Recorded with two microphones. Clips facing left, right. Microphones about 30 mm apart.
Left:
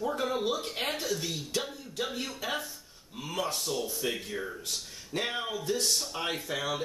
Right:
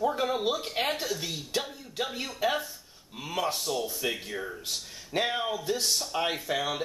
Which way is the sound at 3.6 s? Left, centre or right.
Centre.